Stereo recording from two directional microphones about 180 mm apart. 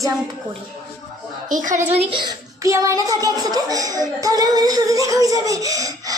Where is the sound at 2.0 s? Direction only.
30° right (ahead or behind).